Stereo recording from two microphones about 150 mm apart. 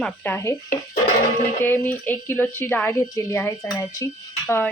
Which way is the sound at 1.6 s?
10° left (ahead or behind).